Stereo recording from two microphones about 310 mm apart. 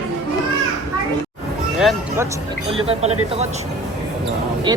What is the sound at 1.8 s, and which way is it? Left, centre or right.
Speech, centre.